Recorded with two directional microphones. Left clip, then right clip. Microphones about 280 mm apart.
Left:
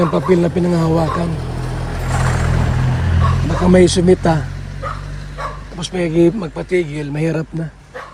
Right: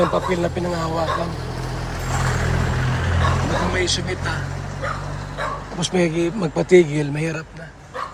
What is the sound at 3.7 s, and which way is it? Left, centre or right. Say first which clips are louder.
Speech: left 11 dB; centre.